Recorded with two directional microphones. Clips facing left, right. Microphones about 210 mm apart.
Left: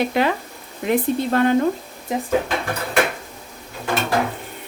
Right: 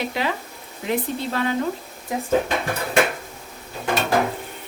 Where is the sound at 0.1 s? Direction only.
55° left (ahead or behind).